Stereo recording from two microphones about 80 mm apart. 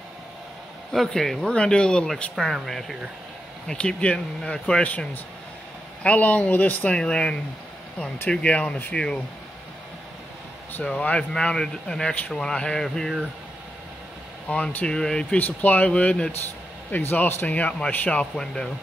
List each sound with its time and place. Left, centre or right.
0.9 s speech: centre
2.3 s speech: centre
3.6 s speech: centre
8.9 s speech: centre
10.7 s speech: centre
14.5 s speech: centre
15.3 s a man's voice: left